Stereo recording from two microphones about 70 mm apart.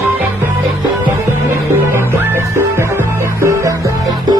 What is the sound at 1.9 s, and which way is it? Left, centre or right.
Music, right.